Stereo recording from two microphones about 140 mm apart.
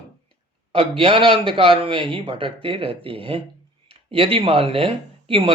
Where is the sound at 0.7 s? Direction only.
40° right (ahead or behind).